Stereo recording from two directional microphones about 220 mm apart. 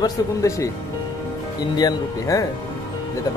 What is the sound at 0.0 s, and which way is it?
Speech, 15° left (ahead or behind).